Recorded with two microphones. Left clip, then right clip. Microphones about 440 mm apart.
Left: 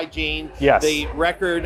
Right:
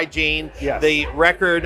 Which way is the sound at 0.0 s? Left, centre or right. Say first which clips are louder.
Right 5 dB; right.